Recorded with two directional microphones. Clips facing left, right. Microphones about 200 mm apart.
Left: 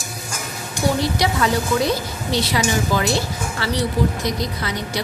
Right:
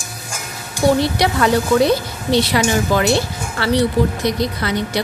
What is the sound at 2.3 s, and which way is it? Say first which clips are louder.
Speech: right 5 dB; 60° right (ahead or behind).